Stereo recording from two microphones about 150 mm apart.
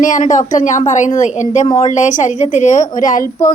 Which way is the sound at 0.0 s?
55° left (ahead or behind).